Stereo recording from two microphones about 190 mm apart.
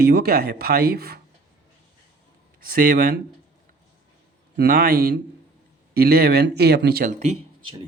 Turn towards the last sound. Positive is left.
turn(degrees=-35)  # may be behind; listen again after turning